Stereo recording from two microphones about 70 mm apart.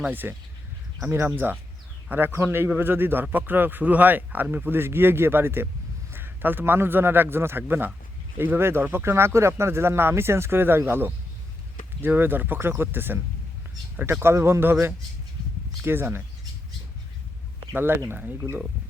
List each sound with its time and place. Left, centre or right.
0.1 s a man's voice: right
1.0 s a man's voice: right
17.7 s speech: right